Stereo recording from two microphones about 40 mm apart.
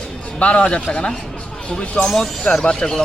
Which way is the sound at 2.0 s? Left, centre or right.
Left.